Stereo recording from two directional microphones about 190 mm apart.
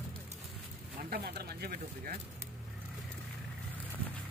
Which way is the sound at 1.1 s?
55° right (ahead or behind).